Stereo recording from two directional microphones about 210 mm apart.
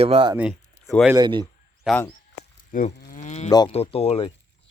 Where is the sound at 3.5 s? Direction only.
20° left (ahead or behind).